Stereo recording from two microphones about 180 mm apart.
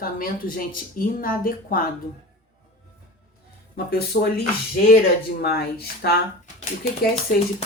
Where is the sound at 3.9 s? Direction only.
60° left (ahead or behind).